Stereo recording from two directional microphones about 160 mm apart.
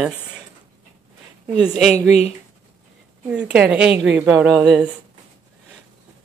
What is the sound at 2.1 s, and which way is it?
Speech, 40° left (ahead or behind).